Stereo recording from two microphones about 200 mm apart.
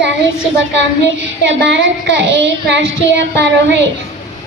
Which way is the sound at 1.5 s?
65° right (ahead or behind).